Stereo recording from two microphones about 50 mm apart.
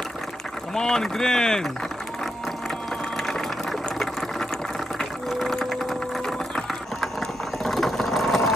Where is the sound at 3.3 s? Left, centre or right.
Centre.